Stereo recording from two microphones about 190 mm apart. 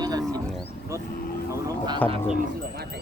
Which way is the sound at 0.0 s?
20° right (ahead or behind).